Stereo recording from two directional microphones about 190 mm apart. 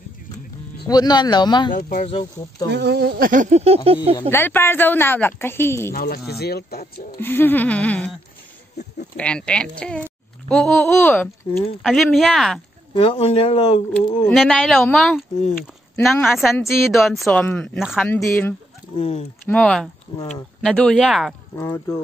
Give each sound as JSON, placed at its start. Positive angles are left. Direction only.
{"t": 0.8, "sound": "speech", "side_deg": 20}
{"t": 1.7, "sound": "speech", "side_deg": 50}
{"t": 2.7, "sound": "speech", "side_deg": -60}
{"t": 4.3, "sound": "a woman's voice", "side_deg": 10}
{"t": 5.9, "sound": "speech", "side_deg": 55}
{"t": 7.2, "sound": "a woman's voice", "side_deg": 10}
{"t": 9.1, "sound": "speech", "side_deg": 5}
{"t": 12.9, "sound": "speech", "side_deg": 25}
{"t": 13.9, "sound": "speech", "side_deg": 0}
{"t": 18.0, "sound": "a woman's voice", "side_deg": 10}
{"t": 18.9, "sound": "speech", "side_deg": 30}
{"t": 19.4, "sound": "speech", "side_deg": 5}
{"t": 21.5, "sound": "a woman's voice", "side_deg": 15}